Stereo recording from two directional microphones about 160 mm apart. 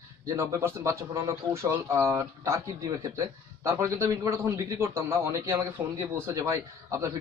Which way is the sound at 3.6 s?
20° right (ahead or behind).